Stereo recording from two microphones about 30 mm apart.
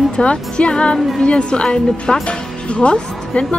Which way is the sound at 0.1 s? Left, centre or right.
Left.